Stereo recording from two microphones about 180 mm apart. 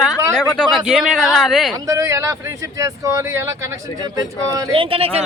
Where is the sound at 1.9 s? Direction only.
15° right (ahead or behind).